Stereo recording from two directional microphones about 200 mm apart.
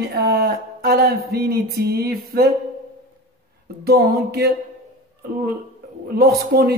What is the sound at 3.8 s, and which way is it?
Speech, 50° right (ahead or behind).